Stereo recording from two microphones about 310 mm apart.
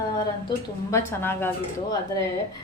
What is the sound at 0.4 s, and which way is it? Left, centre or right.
Speech, centre.